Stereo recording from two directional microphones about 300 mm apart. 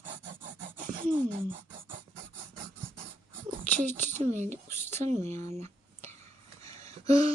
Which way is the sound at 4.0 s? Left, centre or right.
Right.